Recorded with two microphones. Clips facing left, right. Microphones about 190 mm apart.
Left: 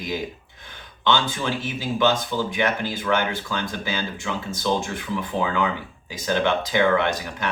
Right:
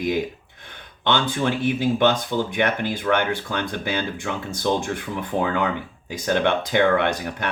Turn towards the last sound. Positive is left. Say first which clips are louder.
# right 1 dB
turn(degrees=-60)  # may be behind; listen again after turning